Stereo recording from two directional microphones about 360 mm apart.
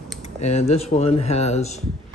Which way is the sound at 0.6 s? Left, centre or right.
Centre.